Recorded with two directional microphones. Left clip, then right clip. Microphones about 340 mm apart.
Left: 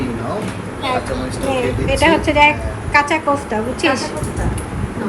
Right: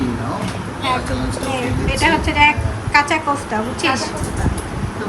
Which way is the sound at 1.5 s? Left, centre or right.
Centre.